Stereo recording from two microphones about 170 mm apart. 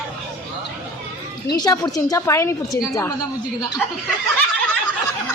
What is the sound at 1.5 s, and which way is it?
A woman's voice, 20° left (ahead or behind).